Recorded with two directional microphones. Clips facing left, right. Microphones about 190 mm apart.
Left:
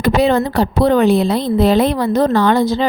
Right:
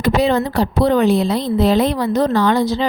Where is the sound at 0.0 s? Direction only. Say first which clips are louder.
Left 2 dB; 55° left (ahead or behind).